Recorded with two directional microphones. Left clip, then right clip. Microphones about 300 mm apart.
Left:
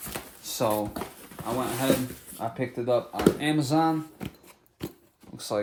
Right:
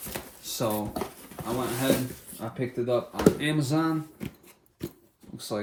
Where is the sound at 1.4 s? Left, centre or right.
Centre.